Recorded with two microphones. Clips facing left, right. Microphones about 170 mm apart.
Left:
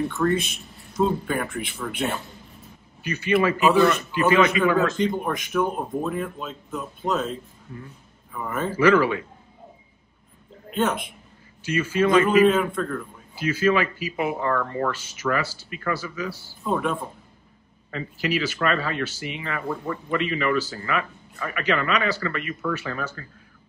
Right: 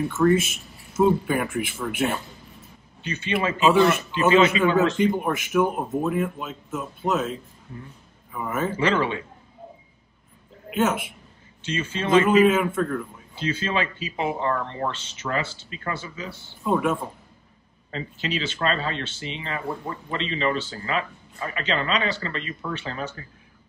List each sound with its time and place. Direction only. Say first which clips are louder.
0.0 s speech: right 3 dB; centre (ahead or behind)
3.0 s a man's voice: left 4 dB; 25° right (ahead or behind)
5.0 s speech: right 2 dB; 5° right (ahead or behind)
8.7 s a man's voice: left 7 dB; 25° right (ahead or behind)
10.7 s a woman's voice: right 1 dB; 5° right (ahead or behind)
11.6 s a man's voice: left 6 dB; 25° right (ahead or behind)
12.4 s speech: even; 5° right (ahead or behind)
13.3 s a man's voice: left 6 dB; 25° right (ahead or behind)
16.6 s speech: right 2 dB; 10° right (ahead or behind)
17.9 s a man's voice: left 3 dB; 25° right (ahead or behind)